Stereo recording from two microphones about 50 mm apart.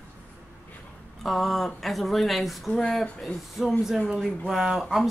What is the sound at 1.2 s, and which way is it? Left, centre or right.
Speech, centre.